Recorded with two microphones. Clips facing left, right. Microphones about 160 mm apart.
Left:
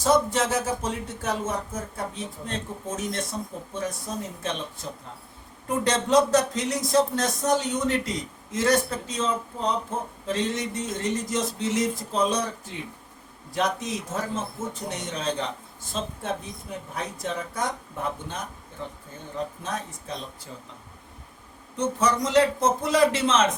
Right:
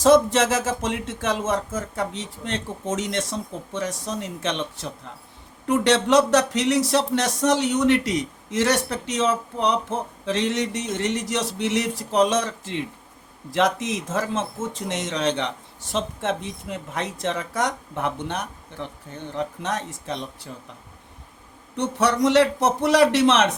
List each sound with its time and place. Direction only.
0.0 s a man's voice: 90° right
21.8 s speech: 75° right (ahead or behind)